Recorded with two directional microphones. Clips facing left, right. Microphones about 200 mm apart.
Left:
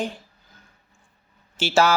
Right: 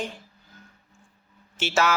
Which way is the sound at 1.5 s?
35° left (ahead or behind).